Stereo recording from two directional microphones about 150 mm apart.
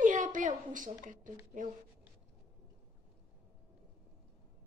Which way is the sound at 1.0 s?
60° right (ahead or behind).